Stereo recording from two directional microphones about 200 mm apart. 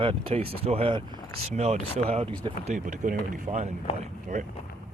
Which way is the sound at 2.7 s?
40° right (ahead or behind).